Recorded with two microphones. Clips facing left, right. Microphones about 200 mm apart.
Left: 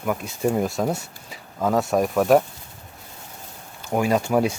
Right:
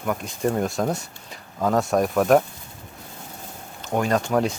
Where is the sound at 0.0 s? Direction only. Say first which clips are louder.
Left 1 dB; 5° left (ahead or behind).